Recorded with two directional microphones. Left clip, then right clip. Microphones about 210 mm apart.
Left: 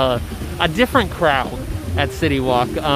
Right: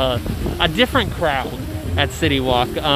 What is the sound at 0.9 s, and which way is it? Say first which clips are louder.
Speech: left 3 dB; 20° left (ahead or behind).